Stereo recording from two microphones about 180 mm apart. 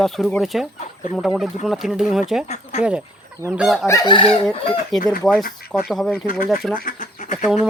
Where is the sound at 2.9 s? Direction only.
5° right (ahead or behind).